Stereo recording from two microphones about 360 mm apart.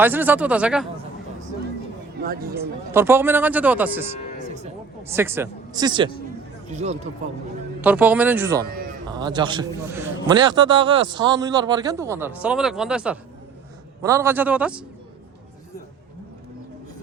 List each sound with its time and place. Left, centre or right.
0.0 s speech: centre
2.2 s a man's voice: right
2.6 s speech: centre
5.1 s a man's voice: centre
7.8 s a man's voice: centre